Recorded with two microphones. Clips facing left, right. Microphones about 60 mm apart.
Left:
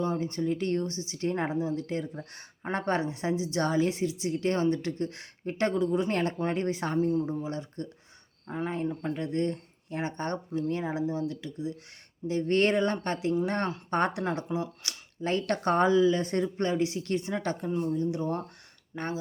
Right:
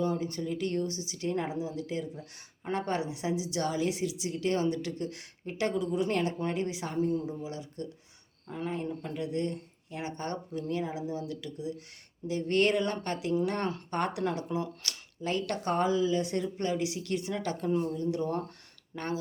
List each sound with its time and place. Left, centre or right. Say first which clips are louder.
0.0 s a woman's voice: left 2 dB; left
15.2 s a woman's voice: left 4 dB; left
17.7 s speech: right 2 dB; centre
17.9 s speech: left 1 dB; left